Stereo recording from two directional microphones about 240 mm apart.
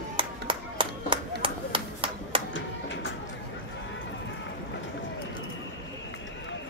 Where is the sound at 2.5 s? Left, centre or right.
Left.